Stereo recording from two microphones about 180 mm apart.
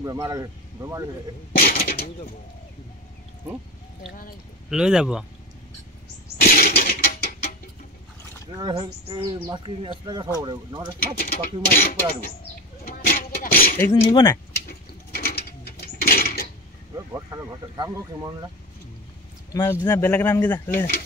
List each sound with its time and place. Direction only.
0.0 s speech: 20° right (ahead or behind)
1.5 s speech: 55° left (ahead or behind)
4.6 s speech: 5° right (ahead or behind)
6.4 s a sound: 55° left (ahead or behind)
8.5 s speech: 25° right (ahead or behind)
11.1 s speech: 55° left (ahead or behind)
12.8 s a sound: 55° left (ahead or behind)
14.1 s a man's voice: 20° left (ahead or behind)
15.1 s mechanisms: 60° left (ahead or behind)
16.9 s speech: 20° right (ahead or behind)
19.5 s speech: 20° left (ahead or behind)
19.9 s a man's voice: 10° left (ahead or behind)
20.7 s speech: 55° left (ahead or behind)